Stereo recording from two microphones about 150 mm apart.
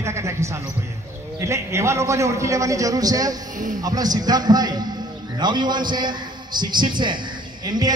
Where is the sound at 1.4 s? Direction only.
20° right (ahead or behind).